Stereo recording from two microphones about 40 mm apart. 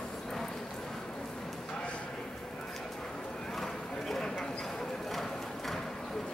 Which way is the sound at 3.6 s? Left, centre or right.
Centre.